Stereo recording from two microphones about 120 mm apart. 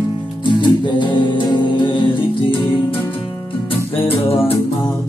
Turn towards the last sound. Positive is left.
turn(degrees=50)  # may be behind; listen again after turning